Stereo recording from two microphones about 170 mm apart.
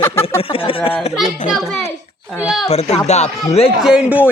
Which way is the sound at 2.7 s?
40° left (ahead or behind).